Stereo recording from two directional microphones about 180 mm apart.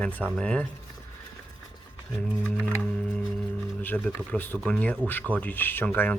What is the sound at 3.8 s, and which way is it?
Speech, 10° left (ahead or behind).